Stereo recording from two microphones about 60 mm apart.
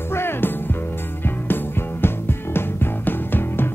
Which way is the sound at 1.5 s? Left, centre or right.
Left.